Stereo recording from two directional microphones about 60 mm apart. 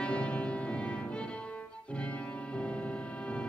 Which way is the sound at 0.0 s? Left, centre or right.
Centre.